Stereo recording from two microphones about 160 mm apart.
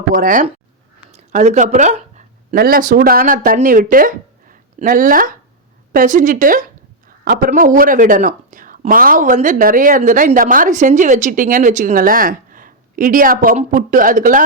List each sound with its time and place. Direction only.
0.1 s speech: 60° right (ahead or behind)
1.1 s a sound: 45° right (ahead or behind)
2.6 s speech: 65° right (ahead or behind)